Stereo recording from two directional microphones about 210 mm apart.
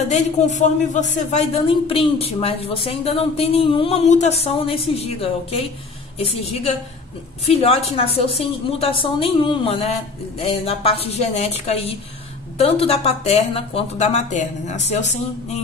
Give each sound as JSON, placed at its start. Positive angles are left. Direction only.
{"t": 0.1, "sound": "speech", "side_deg": 35}